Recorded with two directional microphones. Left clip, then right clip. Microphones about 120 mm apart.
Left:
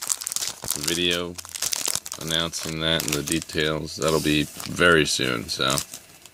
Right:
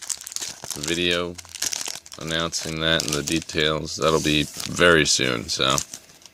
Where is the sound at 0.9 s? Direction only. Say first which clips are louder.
Right 1 dB; 45° right (ahead or behind).